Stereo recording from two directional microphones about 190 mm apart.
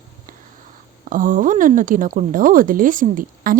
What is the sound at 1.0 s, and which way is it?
A woman's voice, 45° right (ahead or behind).